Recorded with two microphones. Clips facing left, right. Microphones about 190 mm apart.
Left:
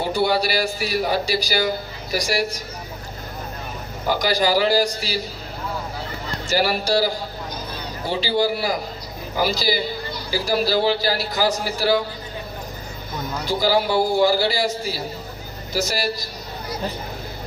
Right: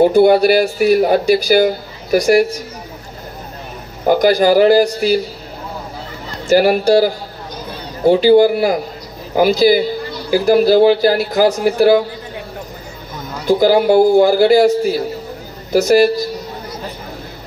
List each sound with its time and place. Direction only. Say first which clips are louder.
0.0 s speech: right 11 dB; 55° right (ahead or behind)
4.1 s speech: right 9 dB; 55° right (ahead or behind)
6.4 s speech: right 10 dB; 50° right (ahead or behind)
13.5 s a man's voice: right 9 dB; 55° right (ahead or behind)